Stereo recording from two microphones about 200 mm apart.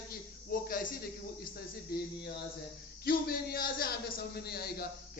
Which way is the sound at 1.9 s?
50° left (ahead or behind).